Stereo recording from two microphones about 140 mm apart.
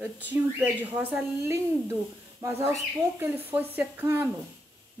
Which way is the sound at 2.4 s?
20° right (ahead or behind).